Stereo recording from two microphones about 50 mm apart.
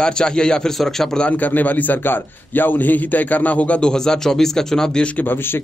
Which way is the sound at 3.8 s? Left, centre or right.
Centre.